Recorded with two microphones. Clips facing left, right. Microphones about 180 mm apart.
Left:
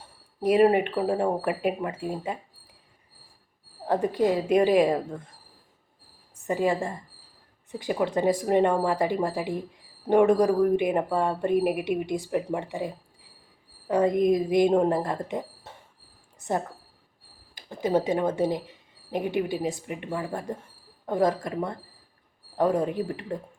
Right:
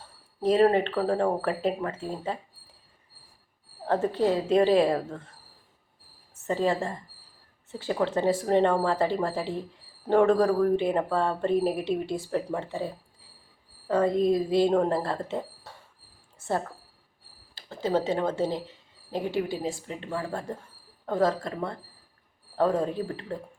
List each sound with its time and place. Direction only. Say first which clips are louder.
0.0 s speech: even; 15° left (ahead or behind)
3.8 s speech: left 1 dB; 15° left (ahead or behind)
6.3 s a woman's voice: left 1 dB; 15° left (ahead or behind)
17.5 s a sound: left 2 dB; 15° left (ahead or behind)
18.1 s speech: left 2 dB; 15° left (ahead or behind)